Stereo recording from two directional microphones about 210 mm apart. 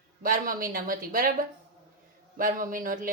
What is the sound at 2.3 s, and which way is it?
Speech, 40° right (ahead or behind).